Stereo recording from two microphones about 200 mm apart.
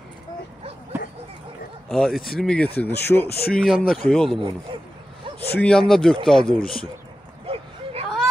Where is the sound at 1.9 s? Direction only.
Centre (ahead or behind).